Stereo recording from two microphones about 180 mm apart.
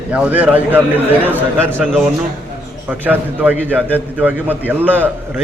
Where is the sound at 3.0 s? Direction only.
10° right (ahead or behind).